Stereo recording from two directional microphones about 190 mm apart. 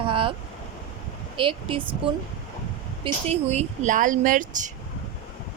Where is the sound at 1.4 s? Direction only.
25° right (ahead or behind).